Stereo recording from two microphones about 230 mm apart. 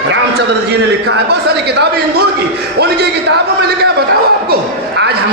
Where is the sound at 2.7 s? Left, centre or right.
Right.